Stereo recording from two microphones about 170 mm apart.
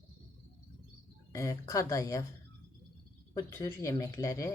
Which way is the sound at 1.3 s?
20° left (ahead or behind).